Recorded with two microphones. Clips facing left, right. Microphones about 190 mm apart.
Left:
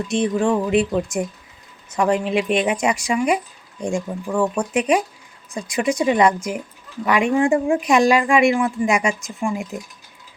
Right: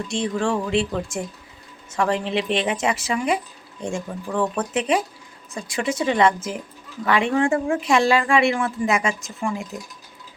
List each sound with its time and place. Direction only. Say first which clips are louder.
0.1 s speech: left 5 dB; 20° left (ahead or behind)